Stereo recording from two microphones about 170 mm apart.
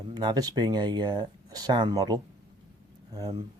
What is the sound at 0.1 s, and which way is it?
Speech, 25° right (ahead or behind).